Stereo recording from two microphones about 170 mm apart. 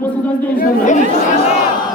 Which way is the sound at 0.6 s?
45° left (ahead or behind).